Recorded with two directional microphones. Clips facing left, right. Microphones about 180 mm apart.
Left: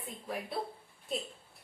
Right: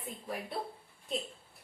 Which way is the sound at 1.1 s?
Centre (ahead or behind).